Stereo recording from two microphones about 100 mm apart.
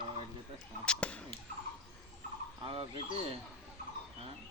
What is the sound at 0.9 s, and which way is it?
Fowl, 10° left (ahead or behind).